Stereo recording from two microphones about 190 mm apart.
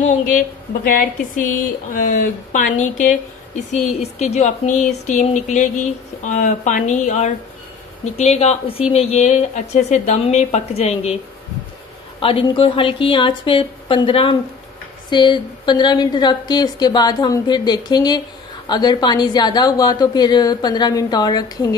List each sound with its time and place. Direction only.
0.0 s a woman's voice: 45° left (ahead or behind)
12.2 s a woman's voice: 30° left (ahead or behind)